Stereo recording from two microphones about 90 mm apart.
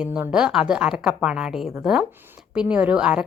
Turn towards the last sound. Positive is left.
turn(degrees=-10)  # may be behind; listen again after turning